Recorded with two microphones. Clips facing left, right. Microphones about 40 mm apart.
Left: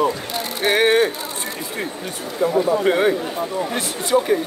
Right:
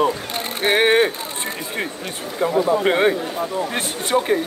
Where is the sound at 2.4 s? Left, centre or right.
Right.